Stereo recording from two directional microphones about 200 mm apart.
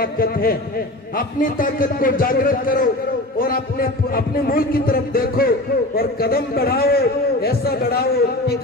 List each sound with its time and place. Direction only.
0.0 s a man's voice: 45° left (ahead or behind)